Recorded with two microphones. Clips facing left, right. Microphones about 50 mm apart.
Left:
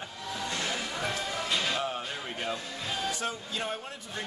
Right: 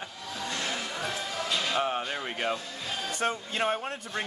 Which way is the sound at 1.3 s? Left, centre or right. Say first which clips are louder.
Right 2 dB; centre.